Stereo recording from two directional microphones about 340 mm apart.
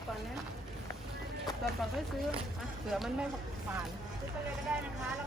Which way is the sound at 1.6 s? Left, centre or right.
Centre.